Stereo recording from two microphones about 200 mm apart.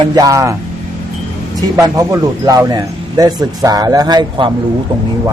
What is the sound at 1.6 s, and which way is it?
Speech, 15° right (ahead or behind).